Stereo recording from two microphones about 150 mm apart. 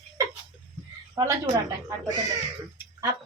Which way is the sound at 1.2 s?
25° right (ahead or behind).